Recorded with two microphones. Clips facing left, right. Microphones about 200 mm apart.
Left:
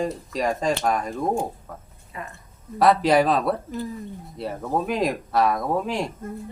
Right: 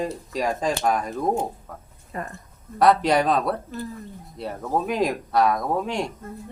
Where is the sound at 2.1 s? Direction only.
45° right (ahead or behind).